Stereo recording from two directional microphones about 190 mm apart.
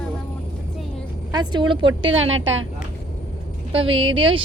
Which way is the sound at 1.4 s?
25° right (ahead or behind).